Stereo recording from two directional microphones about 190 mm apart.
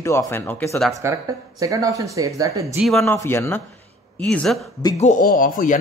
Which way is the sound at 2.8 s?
Centre (ahead or behind).